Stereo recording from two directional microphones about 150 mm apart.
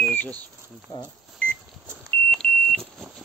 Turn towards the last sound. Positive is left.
turn(degrees=5)  # may be behind; listen again after turning